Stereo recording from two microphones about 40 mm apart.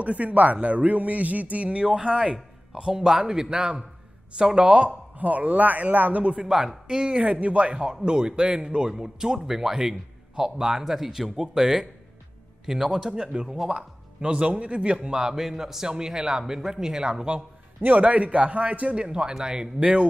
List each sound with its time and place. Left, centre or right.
0.0 s a man's voice: right
4.8 s speech: right
6.4 s speech: centre
7.2 s a man's voice: right
7.6 s speech: right
17.7 s a man's voice: right
18.0 s a man's voice: right; by 19.7 s centre
19.8 s speech: right